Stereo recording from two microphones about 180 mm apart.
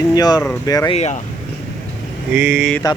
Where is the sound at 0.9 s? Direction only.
40° left (ahead or behind).